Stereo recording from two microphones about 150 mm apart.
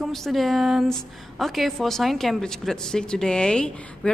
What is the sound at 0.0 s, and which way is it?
Speech, centre (ahead or behind).